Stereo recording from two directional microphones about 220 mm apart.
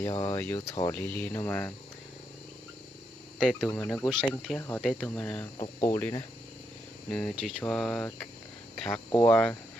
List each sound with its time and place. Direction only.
0.0 s speech: 15° left (ahead or behind)
3.3 s speech: 5° right (ahead or behind)
3.7 s speech: 10° left (ahead or behind)
5.5 s speech: 25° left (ahead or behind)
5.9 s speech: 10° left (ahead or behind)